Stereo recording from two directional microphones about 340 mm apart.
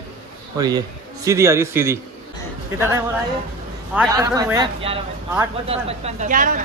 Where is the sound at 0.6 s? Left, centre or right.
Centre.